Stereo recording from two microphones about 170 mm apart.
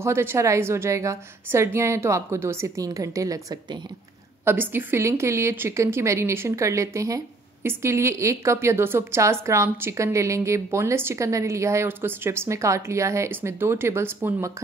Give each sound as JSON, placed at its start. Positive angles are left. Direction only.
{"t": 0.0, "sound": "a woman's voice", "side_deg": -15}